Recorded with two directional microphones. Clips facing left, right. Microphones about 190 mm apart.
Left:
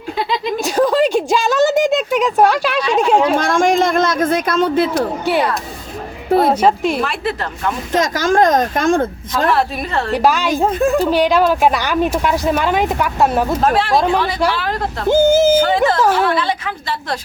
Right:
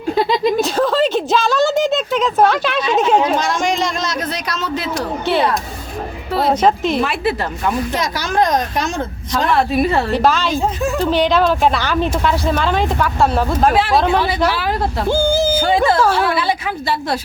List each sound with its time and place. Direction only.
0.6 s a sound: 15° left (ahead or behind)
2.0 s a sound: centre (ahead or behind)
2.4 s speech: 10° left (ahead or behind)
3.3 s speech: 50° left (ahead or behind)
4.9 s speech: 10° left (ahead or behind)
6.5 s speech: 10° left (ahead or behind)
7.9 s speech: 45° left (ahead or behind)
9.5 s speech: centre (ahead or behind)
10.1 s speech: 15° left (ahead or behind)
10.6 s speech: 55° left (ahead or behind)
11.0 s speech: 10° left (ahead or behind)
13.6 s speech: centre (ahead or behind)
15.1 s speech: 20° left (ahead or behind)
15.5 s speech: 10° right (ahead or behind)